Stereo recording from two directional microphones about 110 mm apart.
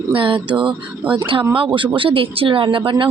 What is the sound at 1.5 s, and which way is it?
Speech, 50° right (ahead or behind).